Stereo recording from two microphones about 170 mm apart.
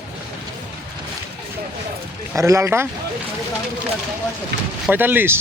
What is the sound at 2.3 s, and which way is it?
Speech, 20° right (ahead or behind).